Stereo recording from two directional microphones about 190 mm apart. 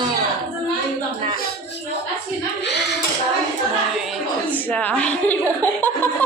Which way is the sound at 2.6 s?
65° left (ahead or behind).